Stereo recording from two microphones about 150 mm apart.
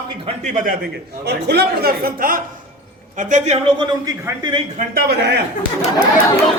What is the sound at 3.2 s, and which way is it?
Speech, 55° right (ahead or behind).